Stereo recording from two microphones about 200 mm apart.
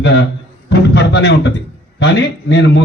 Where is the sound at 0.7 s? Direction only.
60° left (ahead or behind).